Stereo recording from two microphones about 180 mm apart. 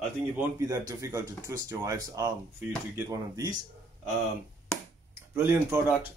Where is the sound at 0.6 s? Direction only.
20° right (ahead or behind).